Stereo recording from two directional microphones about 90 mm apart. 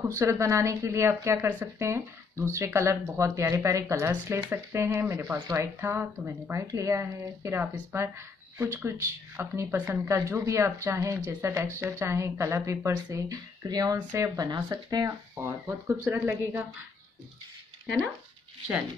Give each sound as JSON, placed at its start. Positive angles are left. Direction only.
{"t": 0.1, "sound": "speech", "side_deg": -30}
{"t": 9.4, "sound": "speech", "side_deg": -25}
{"t": 15.3, "sound": "speech", "side_deg": -25}